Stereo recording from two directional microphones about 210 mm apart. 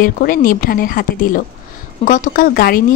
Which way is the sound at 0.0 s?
40° left (ahead or behind).